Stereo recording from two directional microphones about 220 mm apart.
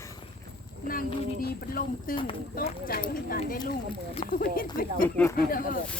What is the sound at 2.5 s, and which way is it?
Speech, 45° left (ahead or behind).